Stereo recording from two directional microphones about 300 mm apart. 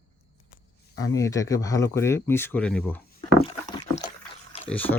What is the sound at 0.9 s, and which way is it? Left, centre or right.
Speech, centre.